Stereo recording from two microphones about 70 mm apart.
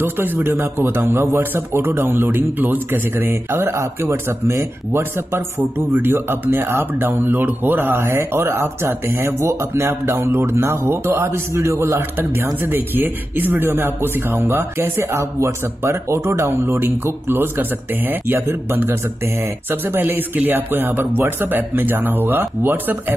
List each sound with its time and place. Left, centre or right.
0.0 s speech: right
5.9 s speech: right